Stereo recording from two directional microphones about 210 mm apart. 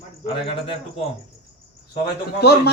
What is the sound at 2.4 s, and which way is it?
Speech, 50° left (ahead or behind).